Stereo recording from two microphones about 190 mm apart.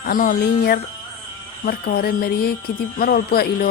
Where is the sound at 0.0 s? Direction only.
45° left (ahead or behind).